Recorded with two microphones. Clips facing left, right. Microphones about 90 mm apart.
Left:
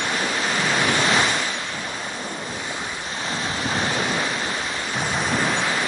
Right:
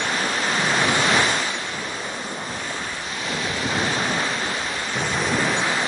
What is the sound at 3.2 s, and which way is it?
Waves, 30° left (ahead or behind).